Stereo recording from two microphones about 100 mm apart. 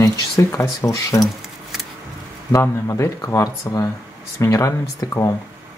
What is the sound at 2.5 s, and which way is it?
Speech, 30° left (ahead or behind).